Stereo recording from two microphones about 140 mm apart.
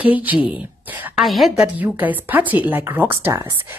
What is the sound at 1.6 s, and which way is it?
A woman's voice, 10° right (ahead or behind).